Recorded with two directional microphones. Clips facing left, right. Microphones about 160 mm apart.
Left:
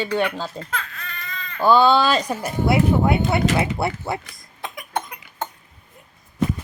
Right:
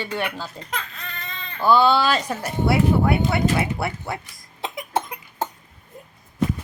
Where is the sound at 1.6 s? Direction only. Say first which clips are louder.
Left 2 dB; 15° left (ahead or behind).